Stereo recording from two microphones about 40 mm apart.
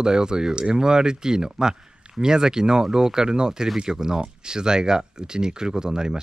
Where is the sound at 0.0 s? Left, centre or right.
Centre.